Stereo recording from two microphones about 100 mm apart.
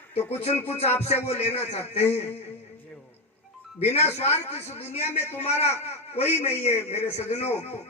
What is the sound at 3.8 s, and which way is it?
Speech, 90° left.